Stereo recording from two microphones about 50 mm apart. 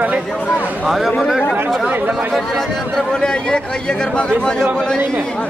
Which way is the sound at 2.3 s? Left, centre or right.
Centre.